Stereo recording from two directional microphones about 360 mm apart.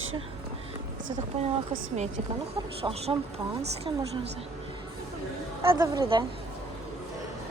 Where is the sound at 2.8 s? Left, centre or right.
Centre.